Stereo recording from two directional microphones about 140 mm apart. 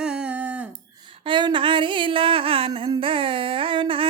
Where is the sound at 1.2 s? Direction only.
35° right (ahead or behind).